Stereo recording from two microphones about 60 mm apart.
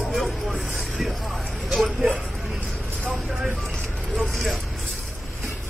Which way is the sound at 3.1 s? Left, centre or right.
Centre.